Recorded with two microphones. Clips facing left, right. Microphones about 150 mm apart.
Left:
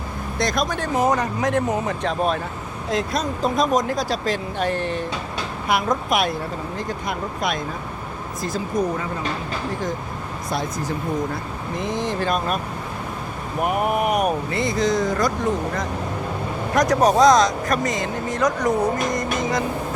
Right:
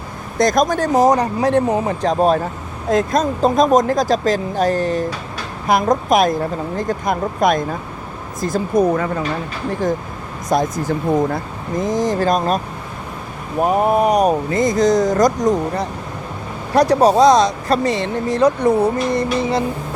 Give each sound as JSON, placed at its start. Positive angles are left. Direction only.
{"t": 0.3, "sound": "speech", "side_deg": -45}
{"t": 2.9, "sound": "speech", "side_deg": -45}
{"t": 10.5, "sound": "speech", "side_deg": -45}
{"t": 11.8, "sound": "speech", "side_deg": -40}
{"t": 13.6, "sound": "speech", "side_deg": -30}
{"t": 19.4, "sound": "vehicle", "side_deg": -30}